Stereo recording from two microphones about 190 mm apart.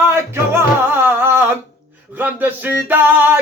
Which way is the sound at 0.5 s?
10° right (ahead or behind).